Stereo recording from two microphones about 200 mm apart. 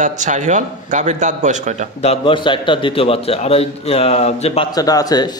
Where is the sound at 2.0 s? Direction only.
25° left (ahead or behind).